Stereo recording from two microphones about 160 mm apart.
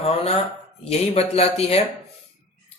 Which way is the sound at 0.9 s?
40° left (ahead or behind).